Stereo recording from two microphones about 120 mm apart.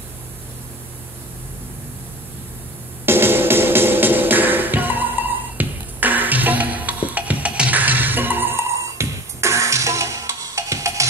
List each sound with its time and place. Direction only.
3.1 s music: 20° right (ahead or behind)